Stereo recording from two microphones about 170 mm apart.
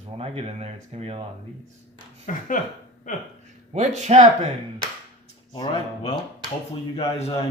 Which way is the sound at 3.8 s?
40° right (ahead or behind).